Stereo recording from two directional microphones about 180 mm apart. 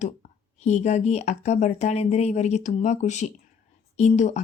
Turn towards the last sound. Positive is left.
turn(degrees=40)  # may be behind; listen again after turning